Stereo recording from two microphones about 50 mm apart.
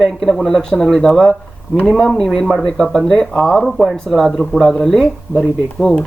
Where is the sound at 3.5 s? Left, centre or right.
Centre.